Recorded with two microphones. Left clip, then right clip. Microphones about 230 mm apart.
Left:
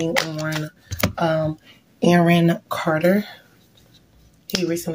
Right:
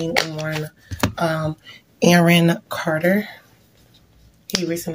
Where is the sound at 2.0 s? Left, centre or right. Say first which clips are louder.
Right 2 dB; right.